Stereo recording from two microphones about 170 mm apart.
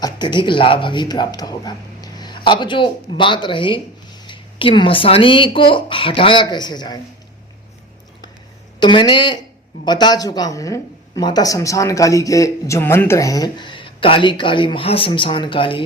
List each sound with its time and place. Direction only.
0.0 s speech: 25° left (ahead or behind)
8.8 s speech: 25° left (ahead or behind)